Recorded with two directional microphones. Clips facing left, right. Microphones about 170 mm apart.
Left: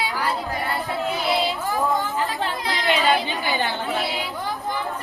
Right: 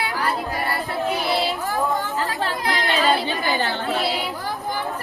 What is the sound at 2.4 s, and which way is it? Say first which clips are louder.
Chatter: right 2 dB; 20° left (ahead or behind).